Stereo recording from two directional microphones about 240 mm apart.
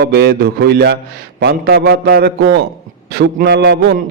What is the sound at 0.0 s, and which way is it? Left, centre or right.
A man's voice, right.